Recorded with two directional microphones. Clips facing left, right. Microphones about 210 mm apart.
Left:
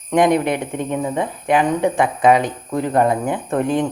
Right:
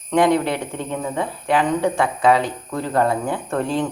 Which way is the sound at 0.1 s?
15° left (ahead or behind).